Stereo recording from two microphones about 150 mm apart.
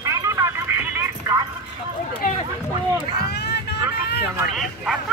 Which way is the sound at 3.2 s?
90° left.